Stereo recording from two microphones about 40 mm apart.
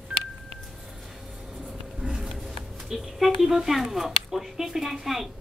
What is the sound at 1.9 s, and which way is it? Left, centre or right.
Speech, centre.